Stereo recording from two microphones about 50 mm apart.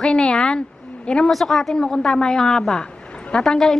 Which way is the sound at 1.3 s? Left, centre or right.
Centre.